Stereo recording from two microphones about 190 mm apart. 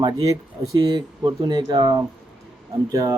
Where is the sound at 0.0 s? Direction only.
20° right (ahead or behind).